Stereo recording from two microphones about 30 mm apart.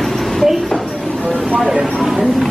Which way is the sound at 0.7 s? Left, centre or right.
Centre.